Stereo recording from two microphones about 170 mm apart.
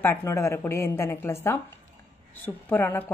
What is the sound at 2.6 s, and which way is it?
Speech, 10° left (ahead or behind).